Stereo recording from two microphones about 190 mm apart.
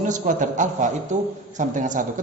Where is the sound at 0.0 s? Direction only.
40° right (ahead or behind).